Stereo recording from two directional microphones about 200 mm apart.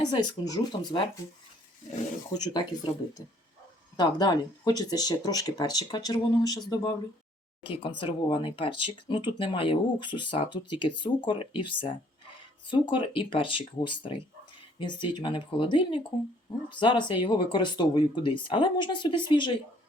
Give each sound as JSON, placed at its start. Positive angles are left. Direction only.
{"t": 0.0, "sound": "speech", "side_deg": 20}
{"t": 2.3, "sound": "speech", "side_deg": 20}
{"t": 3.9, "sound": "speech", "side_deg": 20}